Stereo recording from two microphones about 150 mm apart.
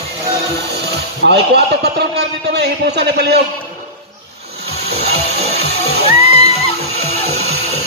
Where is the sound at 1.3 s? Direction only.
90° right.